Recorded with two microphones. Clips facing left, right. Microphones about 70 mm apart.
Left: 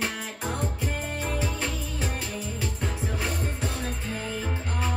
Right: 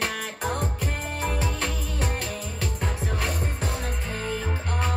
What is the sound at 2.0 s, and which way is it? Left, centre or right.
Music, right.